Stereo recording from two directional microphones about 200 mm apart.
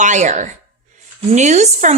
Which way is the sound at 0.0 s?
35° right (ahead or behind).